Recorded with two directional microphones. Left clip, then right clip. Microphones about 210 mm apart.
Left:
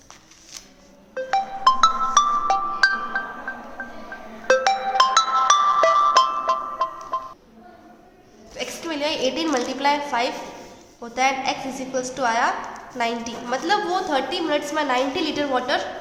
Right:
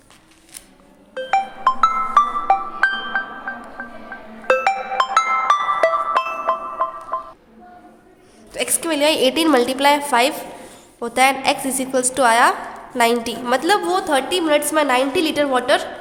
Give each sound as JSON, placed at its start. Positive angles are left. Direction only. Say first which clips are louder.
{"t": 1.1, "sound": "music", "louder": "right 3 dB", "side_deg": -10}
{"t": 8.5, "sound": "a woman's voice", "louder": "right 7 dB", "side_deg": -50}